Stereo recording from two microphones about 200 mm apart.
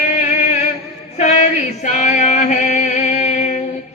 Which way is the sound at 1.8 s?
40° left (ahead or behind).